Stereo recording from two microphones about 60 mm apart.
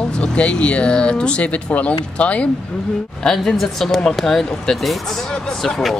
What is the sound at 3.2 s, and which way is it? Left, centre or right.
Speech, centre.